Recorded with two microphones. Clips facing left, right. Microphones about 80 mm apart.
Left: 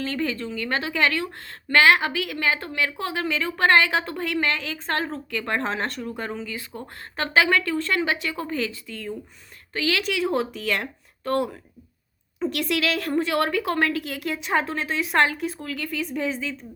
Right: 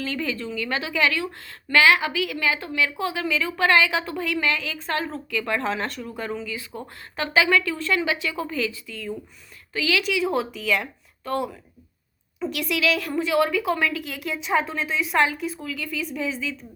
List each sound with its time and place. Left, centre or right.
0.0 s a woman's voice: left
10.6 s speech: left
12.4 s a woman's voice: left